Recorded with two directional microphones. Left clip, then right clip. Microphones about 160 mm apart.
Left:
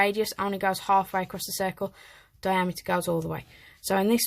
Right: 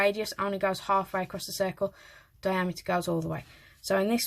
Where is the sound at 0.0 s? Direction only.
25° left (ahead or behind).